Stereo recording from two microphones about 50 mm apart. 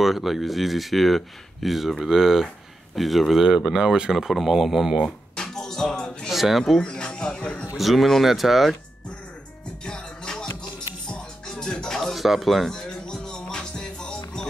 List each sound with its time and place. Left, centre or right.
0.0 s speech: centre
5.0 s a sound: centre
6.3 s speech: centre
6.8 s music: centre
7.7 s speech: centre
9.8 s music: centre
12.7 s music: centre